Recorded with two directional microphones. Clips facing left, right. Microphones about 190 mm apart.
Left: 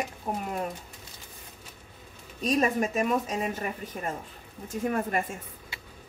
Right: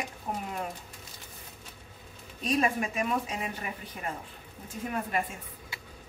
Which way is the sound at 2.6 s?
40° left (ahead or behind).